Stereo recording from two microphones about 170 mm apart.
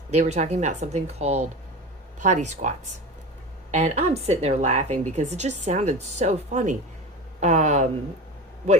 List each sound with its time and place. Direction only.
0.1 s a woman's voice: 40° right (ahead or behind)